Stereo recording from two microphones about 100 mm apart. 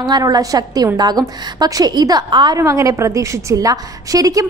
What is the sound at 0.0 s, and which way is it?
A woman's voice, 45° right (ahead or behind).